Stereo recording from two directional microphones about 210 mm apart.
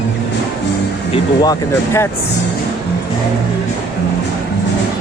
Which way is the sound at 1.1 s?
20° left (ahead or behind).